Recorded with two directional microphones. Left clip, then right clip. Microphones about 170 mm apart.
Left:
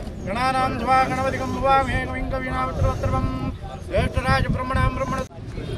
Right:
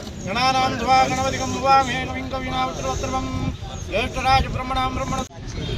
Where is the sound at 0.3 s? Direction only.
20° right (ahead or behind).